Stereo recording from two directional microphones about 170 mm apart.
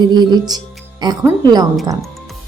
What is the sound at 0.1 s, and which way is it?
A woman's voice, 25° right (ahead or behind).